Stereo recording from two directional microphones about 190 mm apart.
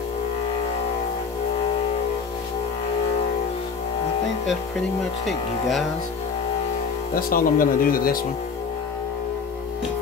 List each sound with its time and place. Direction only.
5.2 s speech: centre (ahead or behind)
7.2 s speech: 50° left (ahead or behind)